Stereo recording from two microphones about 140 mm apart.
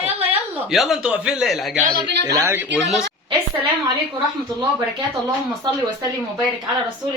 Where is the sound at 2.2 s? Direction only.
20° right (ahead or behind).